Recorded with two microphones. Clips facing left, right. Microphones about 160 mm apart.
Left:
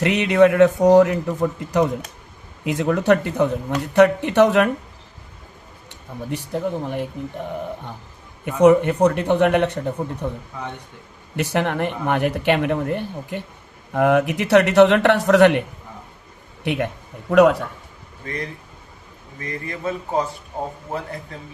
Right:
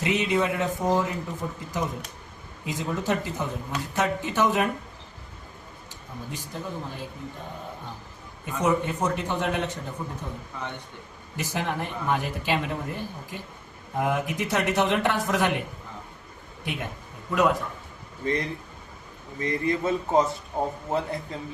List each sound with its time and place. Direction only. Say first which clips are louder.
0.0 s speech: left 9 dB; 70° left (ahead or behind)
6.3 s speech: left 11 dB; 65° left (ahead or behind)
8.4 s speech: left 11 dB; 65° left (ahead or behind)
11.3 s speech: left 8 dB; 70° left (ahead or behind)
16.6 s speech: left 10 dB; 70° left (ahead or behind)
19.4 s a man's voice: right 4 dB; 25° right (ahead or behind)